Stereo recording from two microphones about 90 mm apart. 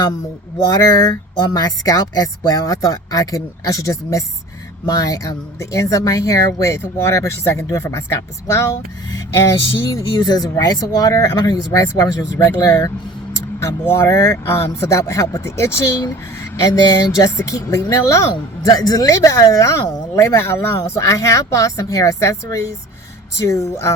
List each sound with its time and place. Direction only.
0.7 s speech: 40° left (ahead or behind)
9.9 s speech: 45° left (ahead or behind)